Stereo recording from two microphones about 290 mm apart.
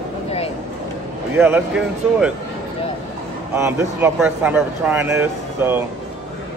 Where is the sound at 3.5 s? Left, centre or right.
Centre.